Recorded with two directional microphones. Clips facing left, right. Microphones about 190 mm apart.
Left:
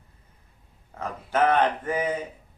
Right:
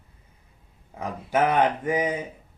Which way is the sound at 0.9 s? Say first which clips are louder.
Right 2 dB; 10° right (ahead or behind).